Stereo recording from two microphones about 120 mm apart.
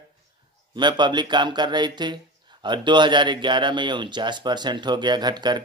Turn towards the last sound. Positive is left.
turn(degrees=-35)  # may be behind; listen again after turning